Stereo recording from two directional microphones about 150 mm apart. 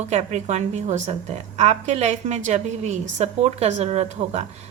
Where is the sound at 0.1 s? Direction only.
50° right (ahead or behind).